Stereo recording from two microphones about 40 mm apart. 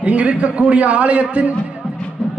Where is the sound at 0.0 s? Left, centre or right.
Right.